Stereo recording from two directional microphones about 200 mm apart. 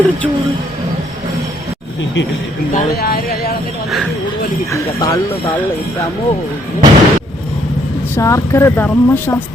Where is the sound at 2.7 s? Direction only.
50° left (ahead or behind).